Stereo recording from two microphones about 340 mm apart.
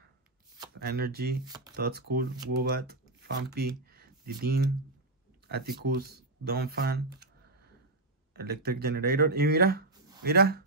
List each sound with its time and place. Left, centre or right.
0.7 s speech: right
8.4 s speech: right